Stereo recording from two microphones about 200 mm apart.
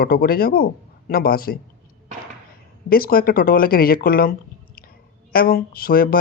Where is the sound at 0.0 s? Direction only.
50° left (ahead or behind).